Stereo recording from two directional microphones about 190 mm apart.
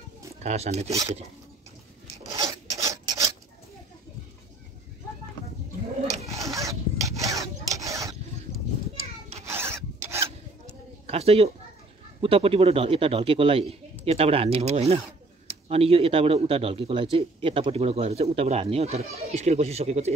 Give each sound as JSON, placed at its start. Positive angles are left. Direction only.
{"t": 0.4, "sound": "a man's voice", "side_deg": -35}
{"t": 2.3, "sound": "filing", "side_deg": -20}
{"t": 6.3, "sound": "filing", "side_deg": -15}
{"t": 9.5, "sound": "filing", "side_deg": -15}
{"t": 11.1, "sound": "a sound", "side_deg": -30}
{"t": 12.2, "sound": "a man's voice", "side_deg": -30}